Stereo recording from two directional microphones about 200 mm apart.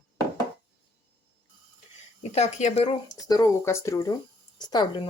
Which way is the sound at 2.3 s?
35° left (ahead or behind).